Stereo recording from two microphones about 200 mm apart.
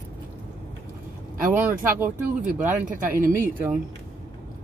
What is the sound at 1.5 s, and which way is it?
Speech, 10° right (ahead or behind).